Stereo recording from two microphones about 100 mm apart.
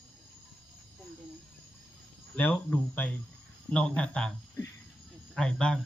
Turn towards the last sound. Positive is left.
turn(degrees=10)  # may be behind; listen again after turning